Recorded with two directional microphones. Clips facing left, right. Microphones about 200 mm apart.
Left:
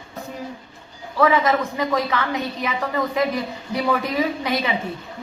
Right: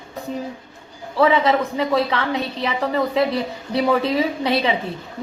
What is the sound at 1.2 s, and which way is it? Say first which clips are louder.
Speech: right 1 dB; 25° right (ahead or behind).